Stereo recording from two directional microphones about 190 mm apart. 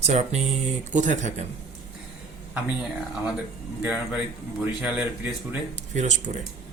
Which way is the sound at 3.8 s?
5° right (ahead or behind).